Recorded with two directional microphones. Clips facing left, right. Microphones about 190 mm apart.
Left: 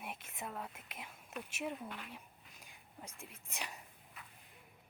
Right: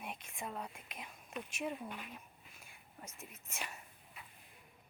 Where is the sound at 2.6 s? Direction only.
15° left (ahead or behind).